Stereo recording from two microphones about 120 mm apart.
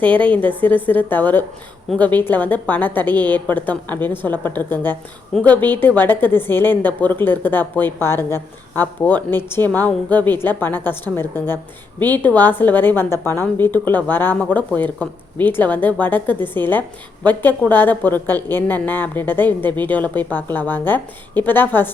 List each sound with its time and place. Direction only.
0.0 s a woman's voice: 15° left (ahead or behind)